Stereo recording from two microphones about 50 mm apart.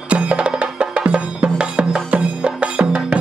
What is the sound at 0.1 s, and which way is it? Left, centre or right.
Music, right.